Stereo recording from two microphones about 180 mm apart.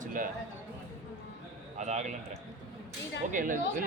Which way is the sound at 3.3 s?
45° right (ahead or behind).